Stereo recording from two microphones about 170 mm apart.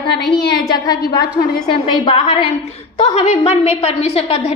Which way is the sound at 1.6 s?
30° left (ahead or behind).